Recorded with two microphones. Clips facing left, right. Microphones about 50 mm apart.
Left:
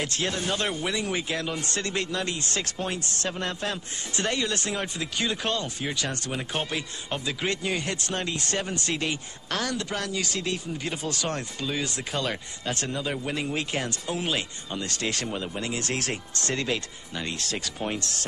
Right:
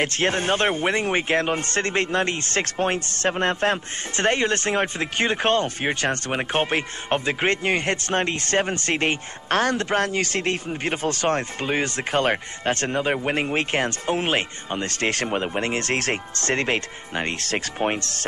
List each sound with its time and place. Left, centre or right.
0.0 s a man's voice: right